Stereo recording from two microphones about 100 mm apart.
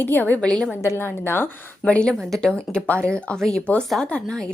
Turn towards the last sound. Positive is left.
turn(degrees=5)  # may be behind; listen again after turning